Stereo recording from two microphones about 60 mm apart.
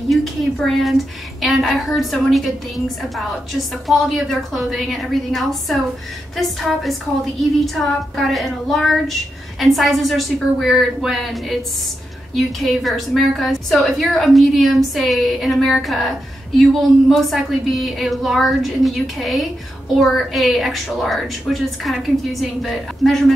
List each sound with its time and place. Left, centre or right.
0.1 s a woman's voice: centre
3.8 s a woman's voice: centre